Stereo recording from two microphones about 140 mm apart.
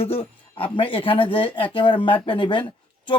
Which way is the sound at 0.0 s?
40° left (ahead or behind).